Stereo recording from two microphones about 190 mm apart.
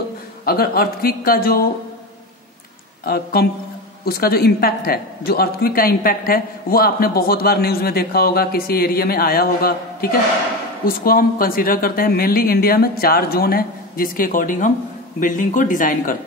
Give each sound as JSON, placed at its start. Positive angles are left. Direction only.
{"t": 0.5, "sound": "a woman's voice", "side_deg": 50}
{"t": 4.0, "sound": "a woman's voice", "side_deg": 55}